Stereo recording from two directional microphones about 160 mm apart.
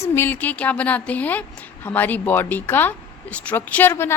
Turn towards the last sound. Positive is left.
turn(degrees=15)  # may be behind; listen again after turning